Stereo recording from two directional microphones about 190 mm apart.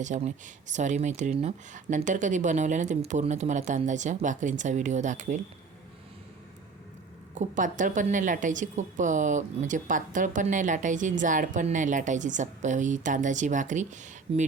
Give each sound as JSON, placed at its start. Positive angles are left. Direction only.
{"t": 0.0, "sound": "a woman's voice", "side_deg": -40}
{"t": 7.3, "sound": "a woman's voice", "side_deg": -45}